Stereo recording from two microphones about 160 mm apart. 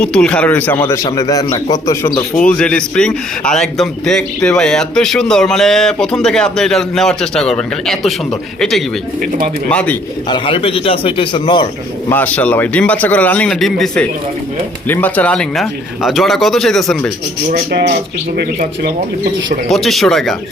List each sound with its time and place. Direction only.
0.0 s a man's voice: 5° left (ahead or behind); by 2.2 s 25° left (ahead or behind)
2.4 s a man's voice: 5° left (ahead or behind)
9.6 s a man's voice: 10° left (ahead or behind)
10.2 s a man's voice: 30° left (ahead or behind)
12.0 s a man's voice: 10° left (ahead or behind)
17.5 s speech: 85° right
19.6 s a man's voice: centre (ahead or behind)